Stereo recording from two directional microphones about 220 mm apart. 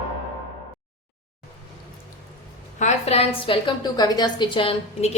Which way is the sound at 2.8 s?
30° left (ahead or behind).